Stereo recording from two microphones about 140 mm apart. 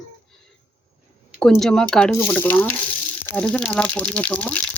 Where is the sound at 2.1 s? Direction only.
20° left (ahead or behind).